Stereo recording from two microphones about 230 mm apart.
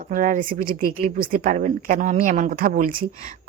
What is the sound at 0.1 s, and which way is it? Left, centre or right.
Speech, right.